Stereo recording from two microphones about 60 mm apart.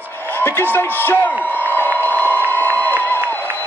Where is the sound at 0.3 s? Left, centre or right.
Left.